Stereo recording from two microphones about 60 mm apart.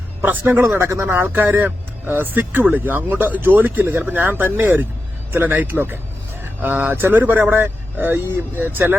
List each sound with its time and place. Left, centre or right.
0.2 s speech: right
0.8 s speech: right
1.0 s speech: right